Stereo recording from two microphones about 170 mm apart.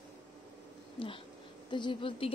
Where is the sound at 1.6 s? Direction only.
25° left (ahead or behind).